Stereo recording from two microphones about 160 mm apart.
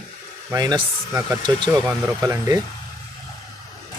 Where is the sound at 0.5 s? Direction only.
25° right (ahead or behind).